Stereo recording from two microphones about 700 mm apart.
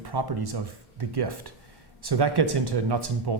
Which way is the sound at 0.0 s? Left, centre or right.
Right.